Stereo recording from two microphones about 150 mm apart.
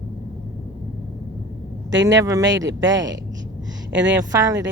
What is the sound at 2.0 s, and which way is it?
Speech, 20° right (ahead or behind).